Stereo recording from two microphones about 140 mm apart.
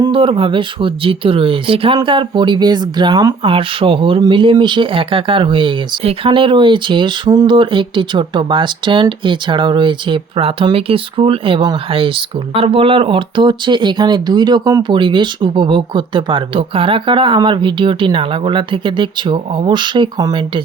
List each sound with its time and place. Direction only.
0.0 s speech: 40° right (ahead or behind)